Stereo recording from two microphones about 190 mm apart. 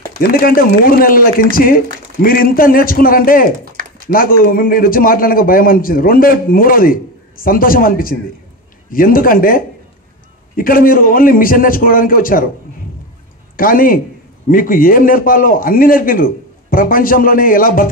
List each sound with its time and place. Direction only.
0.3 s a man's voice: 50° left (ahead or behind)
13.6 s a man's voice: 50° left (ahead or behind)